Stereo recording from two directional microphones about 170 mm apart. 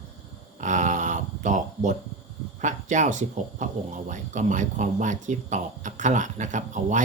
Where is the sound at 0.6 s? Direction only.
45° right (ahead or behind).